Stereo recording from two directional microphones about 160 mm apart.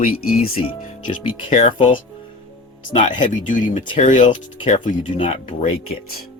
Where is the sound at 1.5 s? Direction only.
40° left (ahead or behind).